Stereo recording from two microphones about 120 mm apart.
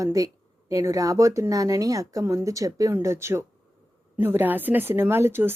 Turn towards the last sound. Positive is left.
turn(degrees=-20)  # may be behind; listen again after turning